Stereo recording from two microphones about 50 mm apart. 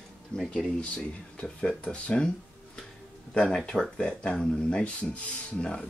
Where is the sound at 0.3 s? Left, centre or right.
Centre.